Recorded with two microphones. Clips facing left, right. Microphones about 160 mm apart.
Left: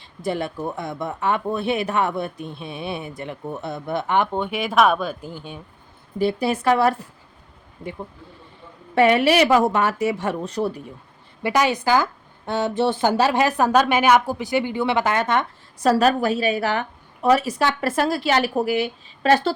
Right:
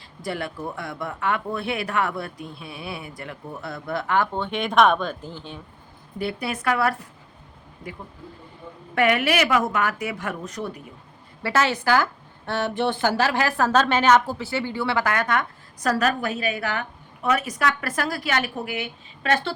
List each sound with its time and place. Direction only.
0.2 s speech: 20° left (ahead or behind)
6.1 s speech: 25° left (ahead or behind)
9.0 s speech: 25° left (ahead or behind)
11.4 s a woman's voice: 15° left (ahead or behind); by 19.5 s 35° left (ahead or behind)